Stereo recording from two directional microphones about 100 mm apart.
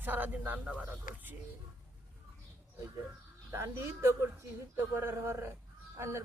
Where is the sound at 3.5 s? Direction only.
30° right (ahead or behind).